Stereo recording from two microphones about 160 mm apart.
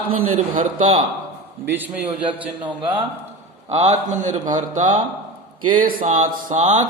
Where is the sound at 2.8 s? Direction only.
30° right (ahead or behind).